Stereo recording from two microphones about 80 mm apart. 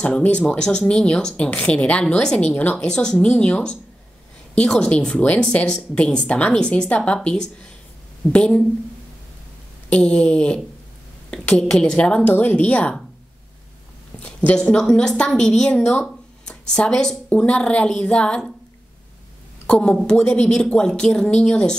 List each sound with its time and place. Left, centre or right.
0.0 s speech: centre
8.3 s speech: centre
9.8 s speech: centre
14.2 s speech: centre
19.6 s speech: centre